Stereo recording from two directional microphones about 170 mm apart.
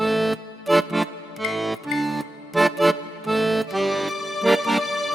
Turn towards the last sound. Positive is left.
turn(degrees=0)  # may be behind; listen again after turning